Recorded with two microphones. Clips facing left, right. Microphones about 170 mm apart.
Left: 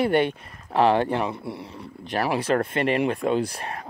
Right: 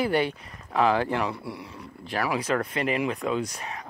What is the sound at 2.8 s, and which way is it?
Speech, 65° left (ahead or behind).